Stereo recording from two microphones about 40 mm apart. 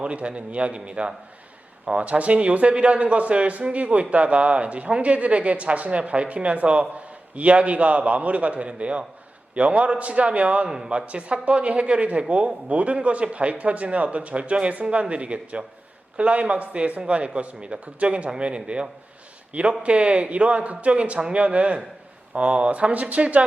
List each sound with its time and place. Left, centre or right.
0.0 s a man's voice: right